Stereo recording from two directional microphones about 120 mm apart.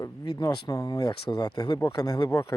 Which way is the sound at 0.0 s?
30° left (ahead or behind).